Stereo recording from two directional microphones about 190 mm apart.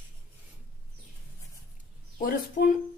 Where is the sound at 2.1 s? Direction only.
50° left (ahead or behind).